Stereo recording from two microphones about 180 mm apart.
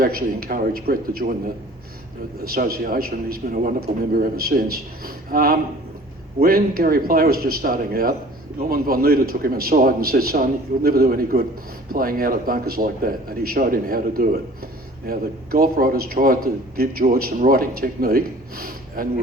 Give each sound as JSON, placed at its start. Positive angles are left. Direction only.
{"t": 0.0, "sound": "a man's voice", "side_deg": -55}
{"t": 2.4, "sound": "a man's voice", "side_deg": -55}